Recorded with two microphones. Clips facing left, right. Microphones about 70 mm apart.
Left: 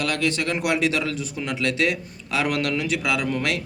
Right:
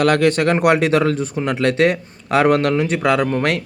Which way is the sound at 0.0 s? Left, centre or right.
Right.